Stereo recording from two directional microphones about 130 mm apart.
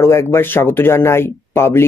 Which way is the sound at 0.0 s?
20° left (ahead or behind).